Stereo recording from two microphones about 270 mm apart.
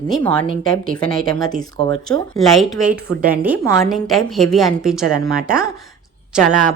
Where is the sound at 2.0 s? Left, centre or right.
Centre.